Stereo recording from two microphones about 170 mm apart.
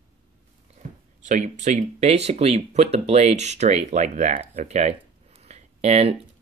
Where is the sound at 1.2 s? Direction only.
45° right (ahead or behind).